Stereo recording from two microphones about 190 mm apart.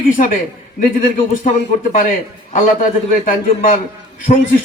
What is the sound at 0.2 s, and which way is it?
Speech, 45° left (ahead or behind).